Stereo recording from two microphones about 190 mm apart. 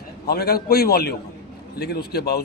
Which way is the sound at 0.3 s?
55° left (ahead or behind).